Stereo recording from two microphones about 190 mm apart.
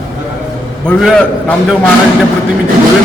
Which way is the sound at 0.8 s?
5° left (ahead or behind).